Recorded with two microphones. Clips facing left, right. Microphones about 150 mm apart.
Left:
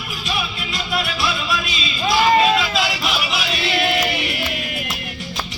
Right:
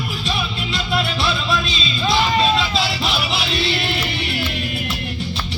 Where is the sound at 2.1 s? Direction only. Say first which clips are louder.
Left 3 dB; 30° right (ahead or behind).